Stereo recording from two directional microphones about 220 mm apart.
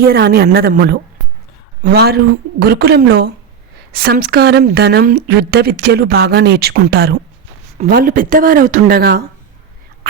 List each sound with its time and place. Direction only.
0.1 s speech: 45° right (ahead or behind)